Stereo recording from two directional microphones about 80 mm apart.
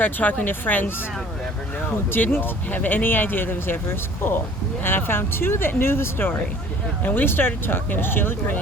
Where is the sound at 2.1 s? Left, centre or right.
Left.